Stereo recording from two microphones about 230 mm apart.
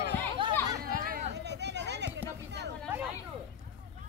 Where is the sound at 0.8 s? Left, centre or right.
Right.